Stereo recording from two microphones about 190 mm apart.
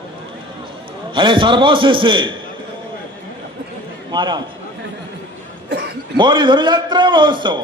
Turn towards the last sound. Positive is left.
turn(degrees=-25)  # may be behind; listen again after turning